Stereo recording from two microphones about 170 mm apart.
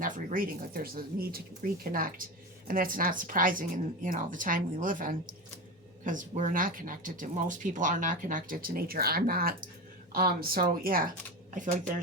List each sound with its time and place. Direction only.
0.0 s speech: 55° right (ahead or behind)